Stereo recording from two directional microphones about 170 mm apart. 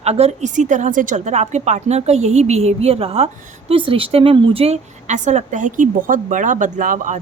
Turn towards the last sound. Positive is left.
turn(degrees=-50)  # may be behind; listen again after turning